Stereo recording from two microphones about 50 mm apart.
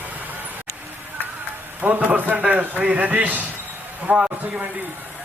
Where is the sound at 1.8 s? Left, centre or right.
Right.